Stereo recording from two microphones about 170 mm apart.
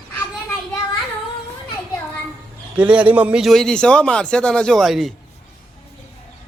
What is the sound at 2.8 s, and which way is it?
A man's voice, 10° right (ahead or behind).